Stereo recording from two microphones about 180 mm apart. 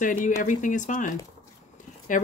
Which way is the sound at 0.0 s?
45° left (ahead or behind).